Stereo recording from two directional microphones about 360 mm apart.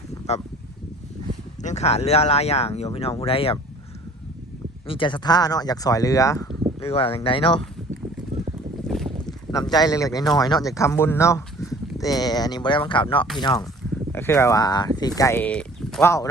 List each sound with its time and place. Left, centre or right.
0.1 s a sound: centre
1.6 s speech: centre
4.9 s speech: centre
8.9 s boat: centre
9.5 s speech: centre